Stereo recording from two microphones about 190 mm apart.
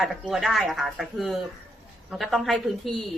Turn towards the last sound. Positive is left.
turn(degrees=0)  # may be behind; listen again after turning